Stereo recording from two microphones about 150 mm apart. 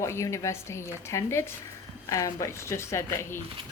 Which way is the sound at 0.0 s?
20° left (ahead or behind).